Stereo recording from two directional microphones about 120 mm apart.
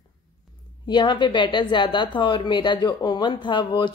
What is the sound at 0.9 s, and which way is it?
Speech, 40° left (ahead or behind).